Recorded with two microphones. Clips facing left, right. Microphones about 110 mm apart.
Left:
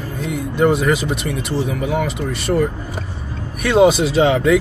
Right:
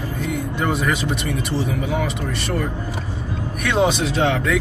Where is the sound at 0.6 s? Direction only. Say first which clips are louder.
Left 8 dB; 5° left (ahead or behind).